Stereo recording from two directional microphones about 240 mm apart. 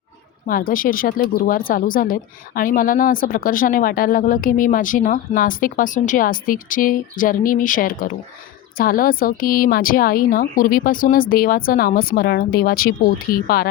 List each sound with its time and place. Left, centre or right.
0.4 s speech: left